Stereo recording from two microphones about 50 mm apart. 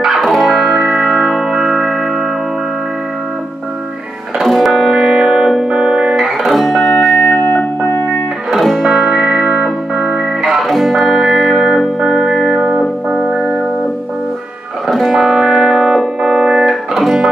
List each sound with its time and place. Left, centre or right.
0.0 s music: centre
4.4 s music: centre
7.3 s music: left
8.5 s music: centre
8.9 s music: centre
14.9 s music: centre